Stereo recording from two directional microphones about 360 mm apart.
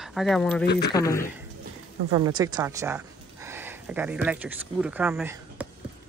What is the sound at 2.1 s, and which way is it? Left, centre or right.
Speech, centre.